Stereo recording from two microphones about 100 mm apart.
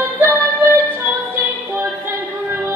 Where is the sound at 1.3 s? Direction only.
20° right (ahead or behind).